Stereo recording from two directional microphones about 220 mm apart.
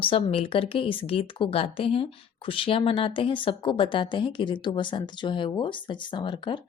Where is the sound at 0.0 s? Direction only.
25° left (ahead or behind).